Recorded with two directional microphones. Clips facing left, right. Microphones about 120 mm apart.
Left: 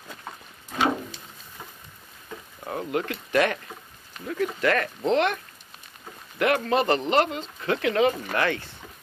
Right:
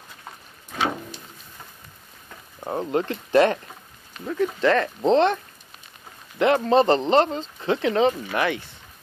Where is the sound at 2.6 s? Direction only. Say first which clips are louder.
Right 4 dB; 30° right (ahead or behind).